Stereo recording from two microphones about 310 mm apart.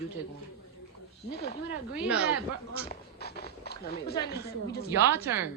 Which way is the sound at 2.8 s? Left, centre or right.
Left.